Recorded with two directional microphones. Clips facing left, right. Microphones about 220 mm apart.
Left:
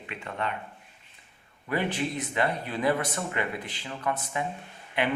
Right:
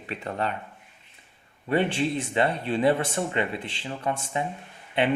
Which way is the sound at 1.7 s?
30° right (ahead or behind).